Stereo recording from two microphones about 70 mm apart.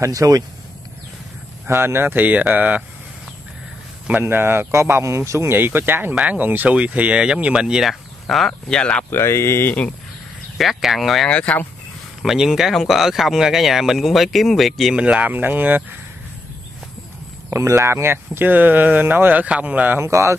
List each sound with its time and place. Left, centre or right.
0.0 s speech: right
1.7 s speech: right
4.1 s speech: right; by 9.0 s centre
9.1 s speech: left
10.6 s speech: centre
11.2 s speech: centre
12.2 s speech: centre
15.0 s speech: centre
17.5 s speech: right
20.0 s speech: right